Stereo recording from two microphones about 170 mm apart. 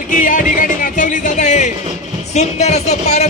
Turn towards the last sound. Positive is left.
turn(degrees=40)  # may be behind; listen again after turning